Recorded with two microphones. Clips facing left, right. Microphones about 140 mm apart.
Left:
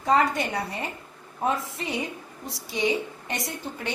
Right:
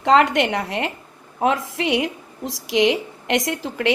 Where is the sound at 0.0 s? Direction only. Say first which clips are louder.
Right 6 dB; 90° right.